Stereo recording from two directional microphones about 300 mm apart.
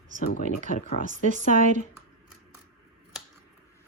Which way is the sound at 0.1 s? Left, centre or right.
Right.